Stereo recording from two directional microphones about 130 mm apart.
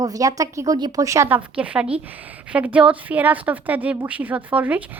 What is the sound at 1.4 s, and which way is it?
A woman's voice, 10° right (ahead or behind).